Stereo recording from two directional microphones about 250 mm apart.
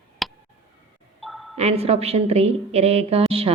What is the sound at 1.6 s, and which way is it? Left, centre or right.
A woman's voice, right.